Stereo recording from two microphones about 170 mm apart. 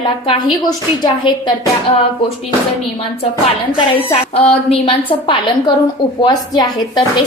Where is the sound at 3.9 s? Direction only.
35° left (ahead or behind).